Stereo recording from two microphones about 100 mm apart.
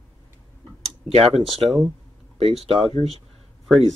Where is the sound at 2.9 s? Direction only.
80° right.